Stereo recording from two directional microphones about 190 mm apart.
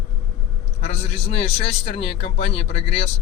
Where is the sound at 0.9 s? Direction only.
30° left (ahead or behind).